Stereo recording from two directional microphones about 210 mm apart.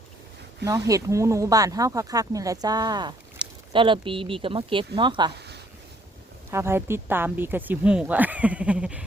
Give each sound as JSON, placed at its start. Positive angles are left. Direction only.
{"t": 0.9, "sound": "speech", "side_deg": -15}
{"t": 6.5, "sound": "speech", "side_deg": -10}